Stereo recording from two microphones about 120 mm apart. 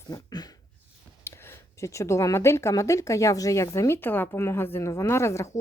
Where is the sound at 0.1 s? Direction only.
35° left (ahead or behind).